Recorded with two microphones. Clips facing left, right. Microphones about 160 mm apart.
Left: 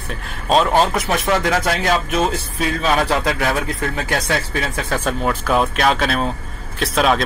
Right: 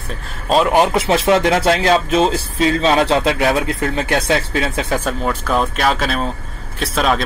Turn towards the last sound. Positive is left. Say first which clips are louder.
# left 1 dB
turn(degrees=0)  # may be behind; listen again after turning